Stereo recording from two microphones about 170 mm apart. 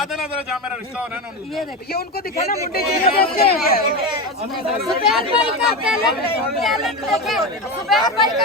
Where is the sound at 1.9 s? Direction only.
65° left (ahead or behind).